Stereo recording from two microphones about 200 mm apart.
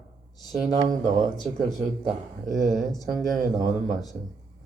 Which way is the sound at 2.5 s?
Centre (ahead or behind).